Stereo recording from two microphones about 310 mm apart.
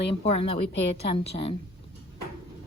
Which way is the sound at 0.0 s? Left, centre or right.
Centre.